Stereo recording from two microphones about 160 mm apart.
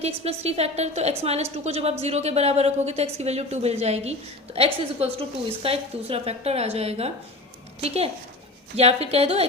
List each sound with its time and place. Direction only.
0.0 s a woman's voice: 40° right (ahead or behind)